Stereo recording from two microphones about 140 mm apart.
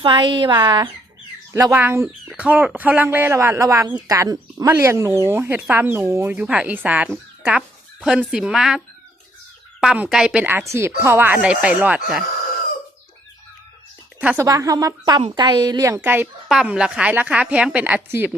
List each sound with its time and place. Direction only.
0.0 s speech: 35° right (ahead or behind)
1.7 s speech: 15° right (ahead or behind)
9.8 s a woman's voice: 5° right (ahead or behind)
14.3 s a woman's voice: 25° right (ahead or behind)
16.0 s speech: 10° right (ahead or behind)